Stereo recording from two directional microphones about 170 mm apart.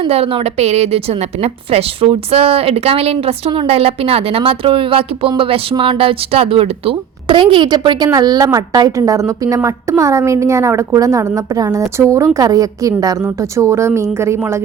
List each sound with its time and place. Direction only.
0.0 s a woman's voice: 35° right (ahead or behind); by 14.6 s 15° right (ahead or behind)